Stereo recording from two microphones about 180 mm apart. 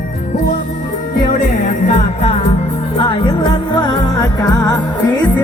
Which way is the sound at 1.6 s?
40° left (ahead or behind).